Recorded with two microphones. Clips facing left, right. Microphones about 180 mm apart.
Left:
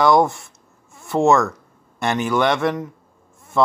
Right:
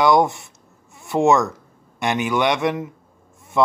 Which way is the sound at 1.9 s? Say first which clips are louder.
Left 1 dB; 15° right (ahead or behind).